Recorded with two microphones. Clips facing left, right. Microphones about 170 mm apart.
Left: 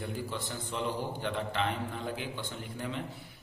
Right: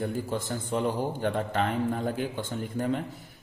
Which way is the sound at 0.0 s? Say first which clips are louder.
Right 7 dB; 45° right (ahead or behind).